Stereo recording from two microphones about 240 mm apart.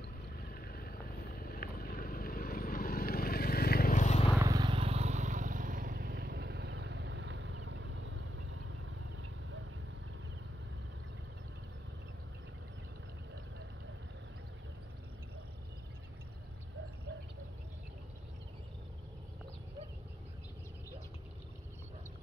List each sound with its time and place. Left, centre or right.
0.4 s vehicle: left
4.4 s vehicle: centre; by 8.7 s right